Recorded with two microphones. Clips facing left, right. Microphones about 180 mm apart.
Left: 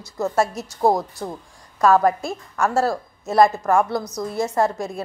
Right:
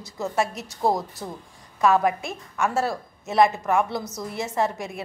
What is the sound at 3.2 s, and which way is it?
Speech, 40° left (ahead or behind).